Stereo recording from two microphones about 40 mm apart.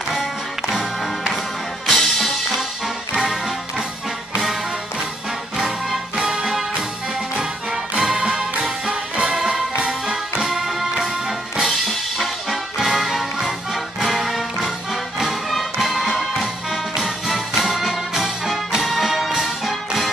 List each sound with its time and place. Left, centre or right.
0.1 s music: centre
1.9 s music: centre
3.2 s music: centre
6.1 s music: centre
8.0 s music: centre
11.6 s music: centre